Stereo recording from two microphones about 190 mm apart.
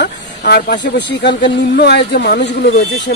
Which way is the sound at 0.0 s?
60° left (ahead or behind).